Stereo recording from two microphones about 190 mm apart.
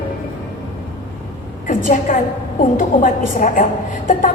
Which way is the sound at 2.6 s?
40° left (ahead or behind).